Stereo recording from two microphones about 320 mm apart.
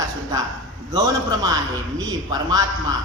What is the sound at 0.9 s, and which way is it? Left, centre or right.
Speech, centre.